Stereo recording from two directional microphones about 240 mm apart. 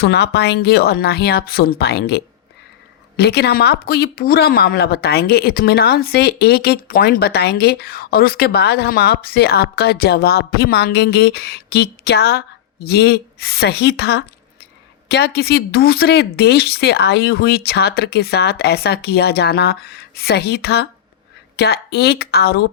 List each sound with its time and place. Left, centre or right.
0.0 s speech: left